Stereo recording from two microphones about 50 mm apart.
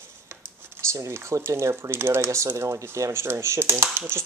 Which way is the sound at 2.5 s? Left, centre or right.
Right.